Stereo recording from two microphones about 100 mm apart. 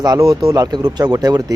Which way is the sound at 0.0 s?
40° right (ahead or behind).